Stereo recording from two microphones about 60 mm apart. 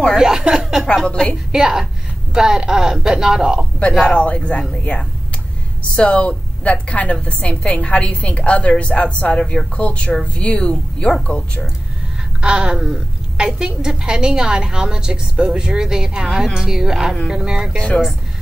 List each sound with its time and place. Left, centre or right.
0.2 s speech: centre
1.1 s a woman's voice: centre
1.5 s a woman's voice: centre
4.0 s a woman's voice: centre
5.9 s a woman's voice: left
12.4 s a woman's voice: centre
17.7 s speech: centre